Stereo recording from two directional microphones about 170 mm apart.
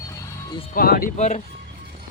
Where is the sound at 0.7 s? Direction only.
60° left (ahead or behind).